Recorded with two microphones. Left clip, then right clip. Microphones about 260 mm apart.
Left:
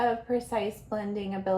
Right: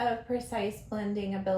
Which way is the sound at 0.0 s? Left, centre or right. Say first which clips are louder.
Left 3 dB; left.